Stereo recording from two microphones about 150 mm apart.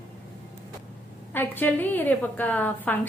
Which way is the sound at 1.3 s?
15° left (ahead or behind).